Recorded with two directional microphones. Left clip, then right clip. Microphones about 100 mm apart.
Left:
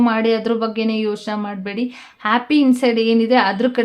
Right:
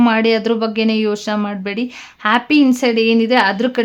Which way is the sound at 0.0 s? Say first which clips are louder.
Right 3 dB; 30° right (ahead or behind).